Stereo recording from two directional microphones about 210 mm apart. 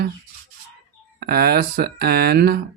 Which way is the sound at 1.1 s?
45° right (ahead or behind).